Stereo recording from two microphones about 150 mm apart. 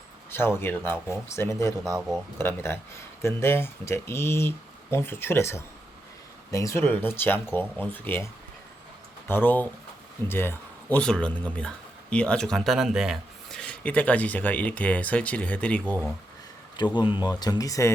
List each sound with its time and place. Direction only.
0.3 s speech: 15° left (ahead or behind)
2.0 s speech: 5° right (ahead or behind)
2.4 s speech: 15° left (ahead or behind)
16.7 s speech: 30° left (ahead or behind)